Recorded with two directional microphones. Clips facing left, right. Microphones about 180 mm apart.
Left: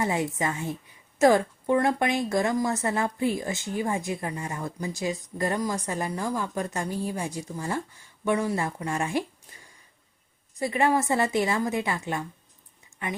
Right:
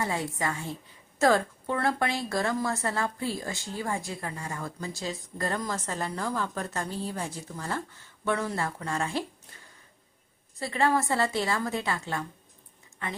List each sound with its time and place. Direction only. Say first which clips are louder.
0.0 s a woman's voice: left 4 dB; 20° left (ahead or behind)
10.6 s a woman's voice: left 2 dB; 20° left (ahead or behind)